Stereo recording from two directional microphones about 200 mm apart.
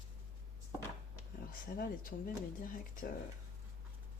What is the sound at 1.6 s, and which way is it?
Speech, 45° left (ahead or behind).